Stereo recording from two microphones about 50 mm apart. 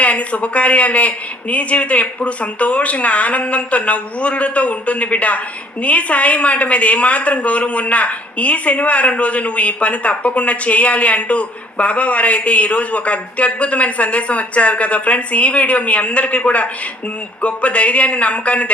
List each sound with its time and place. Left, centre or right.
0.0 s a woman's voice: left